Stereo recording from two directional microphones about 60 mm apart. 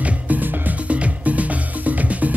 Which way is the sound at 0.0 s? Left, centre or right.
Right.